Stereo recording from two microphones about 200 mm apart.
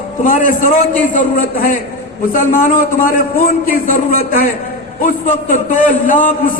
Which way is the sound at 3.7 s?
45° left (ahead or behind).